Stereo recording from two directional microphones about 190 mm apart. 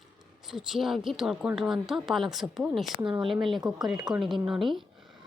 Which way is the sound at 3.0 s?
25° right (ahead or behind).